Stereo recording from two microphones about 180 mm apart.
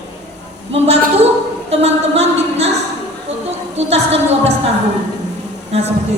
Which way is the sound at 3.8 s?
35° right (ahead or behind).